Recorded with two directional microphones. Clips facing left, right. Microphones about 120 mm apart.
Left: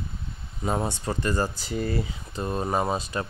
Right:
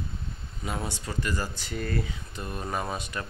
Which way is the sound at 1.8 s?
20° left (ahead or behind).